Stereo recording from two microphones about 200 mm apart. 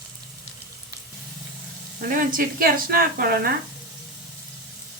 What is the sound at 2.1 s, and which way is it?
Speech, 45° right (ahead or behind).